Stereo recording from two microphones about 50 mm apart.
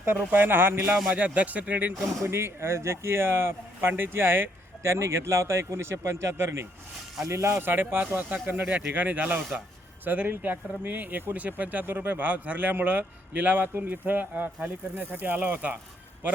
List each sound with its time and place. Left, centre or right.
0.0 s speech: right
1.1 s speech: right
2.2 s speech: right
4.8 s speech: right
7.3 s speech: right
7.6 s speech: right
8.0 s speech: right